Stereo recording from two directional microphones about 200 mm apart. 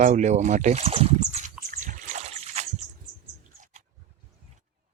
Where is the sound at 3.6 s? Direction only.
40° right (ahead or behind).